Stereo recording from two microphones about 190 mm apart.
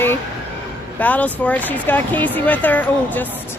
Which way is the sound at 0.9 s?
10° left (ahead or behind).